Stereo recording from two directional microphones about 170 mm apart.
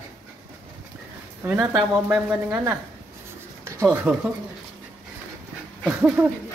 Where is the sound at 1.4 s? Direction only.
15° right (ahead or behind).